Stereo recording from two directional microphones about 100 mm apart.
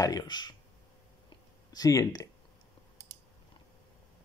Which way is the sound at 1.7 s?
35° left (ahead or behind).